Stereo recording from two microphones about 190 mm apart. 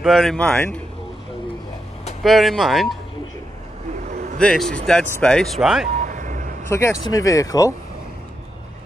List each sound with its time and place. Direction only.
0.0 s speech: centre (ahead or behind)
2.2 s speech: centre (ahead or behind)
4.0 s vehicle: 50° right (ahead or behind)
4.4 s speech: 5° left (ahead or behind)
5.9 s vehicle: 40° right (ahead or behind)
6.7 s speech: 15° left (ahead or behind)